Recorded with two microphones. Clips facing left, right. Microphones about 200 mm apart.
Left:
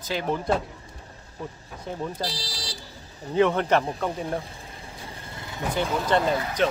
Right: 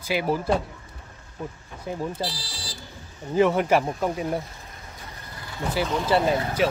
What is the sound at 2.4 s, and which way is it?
Speech, 35° left (ahead or behind).